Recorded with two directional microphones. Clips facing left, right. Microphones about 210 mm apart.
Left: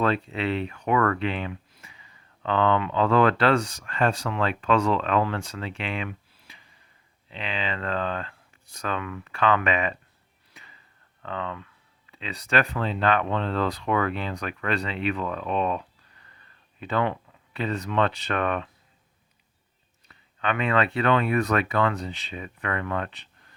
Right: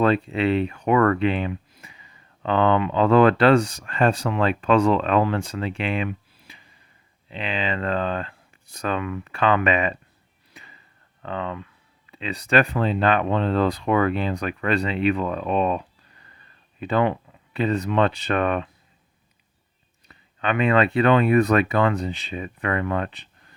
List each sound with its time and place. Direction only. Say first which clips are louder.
0.0 s speech: right 5 dB; 15° right (ahead or behind)
0.7 s speech: right 5 dB; 30° right (ahead or behind)
1.2 s speech: right 6 dB; 20° right (ahead or behind)
7.3 s speech: right 4 dB; 15° right (ahead or behind)
11.3 s speech: right 3 dB; 20° right (ahead or behind)
15.1 s speech: right 4 dB; 30° right (ahead or behind)
16.8 s speech: right 5 dB; 15° right (ahead or behind)
20.4 s speech: right 5 dB; 15° right (ahead or behind)